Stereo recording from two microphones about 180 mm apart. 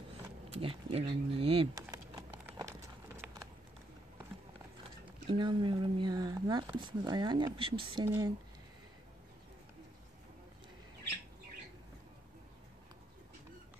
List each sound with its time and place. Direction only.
0.5 s speech: 30° right (ahead or behind)
1.8 s clip-clop: 20° right (ahead or behind)
3.2 s typing: 5° right (ahead or behind)
5.2 s speech: 25° right (ahead or behind)